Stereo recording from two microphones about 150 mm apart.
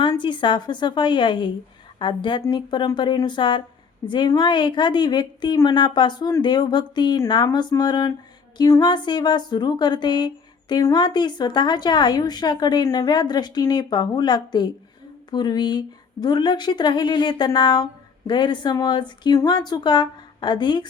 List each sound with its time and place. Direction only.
0.1 s speech: 30° left (ahead or behind)